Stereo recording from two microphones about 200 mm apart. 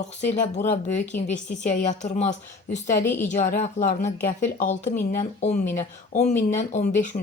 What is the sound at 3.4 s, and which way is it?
Speech, 35° left (ahead or behind).